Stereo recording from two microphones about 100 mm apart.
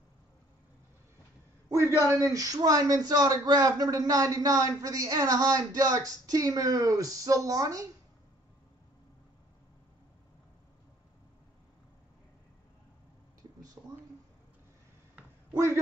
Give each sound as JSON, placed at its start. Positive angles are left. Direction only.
{"t": 1.7, "sound": "a man's voice", "side_deg": -30}
{"t": 13.8, "sound": "a sound", "side_deg": -15}
{"t": 15.5, "sound": "a man's voice", "side_deg": -30}